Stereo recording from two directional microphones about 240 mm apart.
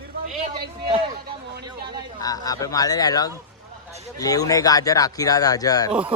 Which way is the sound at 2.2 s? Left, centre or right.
Centre.